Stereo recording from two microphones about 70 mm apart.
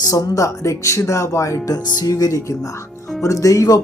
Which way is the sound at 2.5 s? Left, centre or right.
Left.